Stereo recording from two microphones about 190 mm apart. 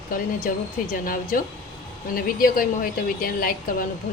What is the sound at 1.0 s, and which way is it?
Speech, 45° left (ahead or behind).